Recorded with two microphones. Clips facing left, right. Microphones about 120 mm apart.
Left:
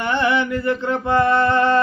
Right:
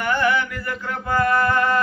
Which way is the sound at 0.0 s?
25° left (ahead or behind).